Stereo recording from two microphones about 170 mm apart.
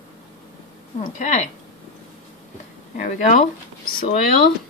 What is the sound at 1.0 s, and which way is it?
Speech, 45° left (ahead or behind).